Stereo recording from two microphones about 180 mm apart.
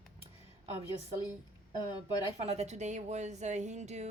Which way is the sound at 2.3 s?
35° right (ahead or behind).